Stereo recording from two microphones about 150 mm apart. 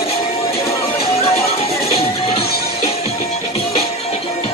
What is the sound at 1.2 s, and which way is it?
Music, 40° left (ahead or behind).